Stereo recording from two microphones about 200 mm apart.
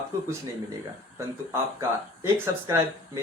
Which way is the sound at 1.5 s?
15° right (ahead or behind).